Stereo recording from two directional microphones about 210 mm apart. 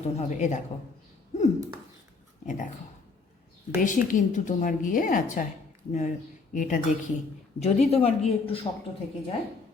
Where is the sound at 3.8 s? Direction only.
35° left (ahead or behind).